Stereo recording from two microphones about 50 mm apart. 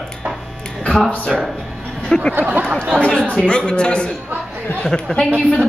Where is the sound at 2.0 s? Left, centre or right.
Centre.